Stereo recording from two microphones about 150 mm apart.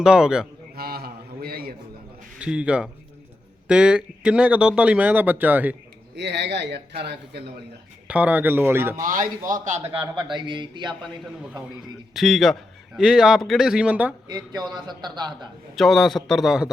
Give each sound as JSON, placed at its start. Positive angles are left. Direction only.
{"t": 0.0, "sound": "a man's voice", "side_deg": -5}
{"t": 0.8, "sound": "a sound", "side_deg": -90}
{"t": 2.4, "sound": "speech", "side_deg": -5}
{"t": 6.7, "sound": "speech", "side_deg": -90}
{"t": 8.0, "sound": "speech", "side_deg": -10}
{"t": 9.0, "sound": "a man's voice", "side_deg": -60}
{"t": 9.9, "sound": "a man's voice", "side_deg": -35}
{"t": 11.0, "sound": "a man's voice", "side_deg": -5}
{"t": 14.3, "sound": "a man's voice", "side_deg": -30}
{"t": 15.7, "sound": "a man's voice", "side_deg": 0}